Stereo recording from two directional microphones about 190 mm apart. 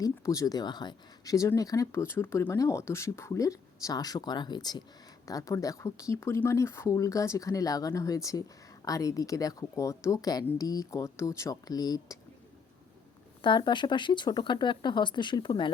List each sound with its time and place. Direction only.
0.0 s speech: 20° left (ahead or behind)
13.4 s speech: 25° left (ahead or behind)